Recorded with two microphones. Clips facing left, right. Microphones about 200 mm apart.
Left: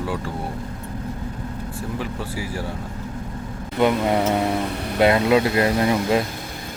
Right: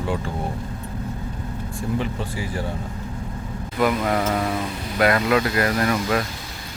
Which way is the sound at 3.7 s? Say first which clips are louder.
Left 2 dB; 25° left (ahead or behind).